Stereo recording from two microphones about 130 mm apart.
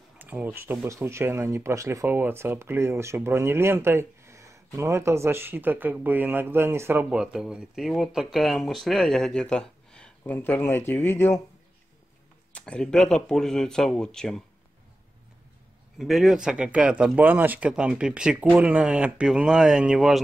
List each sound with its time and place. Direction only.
0.2 s speech: 10° right (ahead or behind); by 11.4 s 15° left (ahead or behind)
12.5 s speech: 10° left (ahead or behind)
16.0 s speech: centre (ahead or behind)